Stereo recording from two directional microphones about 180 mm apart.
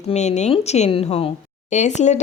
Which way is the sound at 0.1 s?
40° left (ahead or behind).